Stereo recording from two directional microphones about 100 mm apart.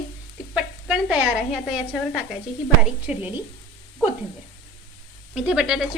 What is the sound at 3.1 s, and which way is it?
Speech, 10° right (ahead or behind).